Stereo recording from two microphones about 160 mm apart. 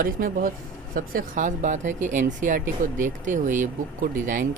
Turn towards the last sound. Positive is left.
turn(degrees=-55)  # may be behind; listen again after turning